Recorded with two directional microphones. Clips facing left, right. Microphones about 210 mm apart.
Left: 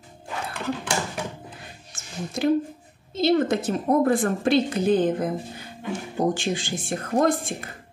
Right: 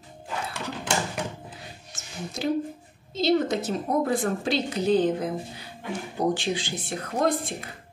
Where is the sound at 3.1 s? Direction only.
55° left (ahead or behind).